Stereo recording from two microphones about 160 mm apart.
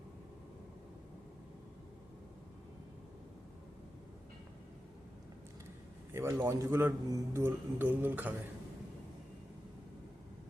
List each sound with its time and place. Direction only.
6.1 s a man's voice: 15° right (ahead or behind)